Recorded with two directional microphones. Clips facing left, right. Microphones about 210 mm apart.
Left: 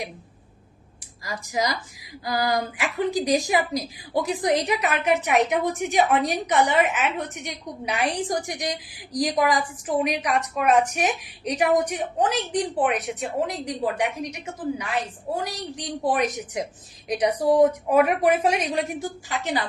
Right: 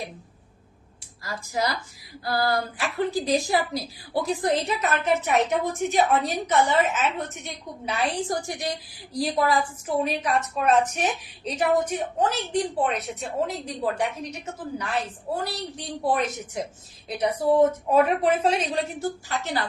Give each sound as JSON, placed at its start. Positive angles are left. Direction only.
{"t": 1.2, "sound": "a woman's voice", "side_deg": 15}